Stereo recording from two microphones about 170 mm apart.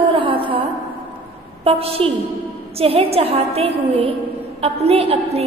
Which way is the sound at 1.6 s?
35° right (ahead or behind).